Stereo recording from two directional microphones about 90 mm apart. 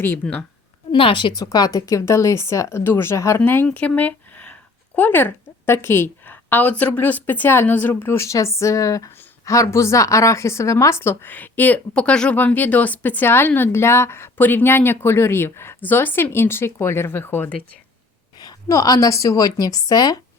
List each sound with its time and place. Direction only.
0.2 s a woman's voice: 5° left (ahead or behind)
0.9 s a woman's voice: 80° left
1.3 s speech: 45° left (ahead or behind); by 17.6 s 25° left (ahead or behind)
18.3 s speech: 45° left (ahead or behind)